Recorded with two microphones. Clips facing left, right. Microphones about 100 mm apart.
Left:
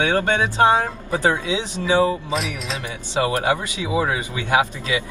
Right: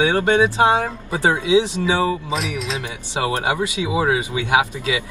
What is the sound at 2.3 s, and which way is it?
Speech, centre (ahead or behind).